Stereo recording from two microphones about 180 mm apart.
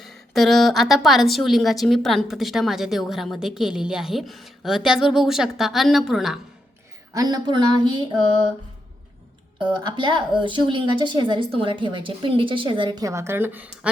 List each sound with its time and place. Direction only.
0.0 s a woman's voice: centre (ahead or behind)
7.1 s speech: 20° right (ahead or behind)
9.6 s speech: 25° right (ahead or behind)